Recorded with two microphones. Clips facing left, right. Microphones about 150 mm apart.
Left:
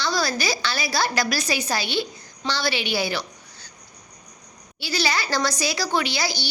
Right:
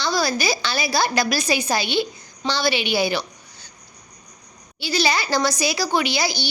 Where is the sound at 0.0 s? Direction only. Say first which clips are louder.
Right 2 dB; 15° right (ahead or behind).